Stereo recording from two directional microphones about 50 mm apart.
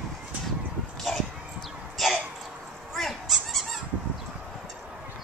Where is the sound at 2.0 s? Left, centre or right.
Centre.